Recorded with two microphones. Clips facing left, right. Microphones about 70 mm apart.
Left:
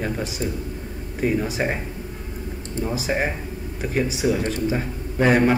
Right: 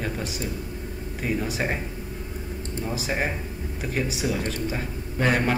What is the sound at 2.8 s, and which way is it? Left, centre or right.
A man's voice, centre.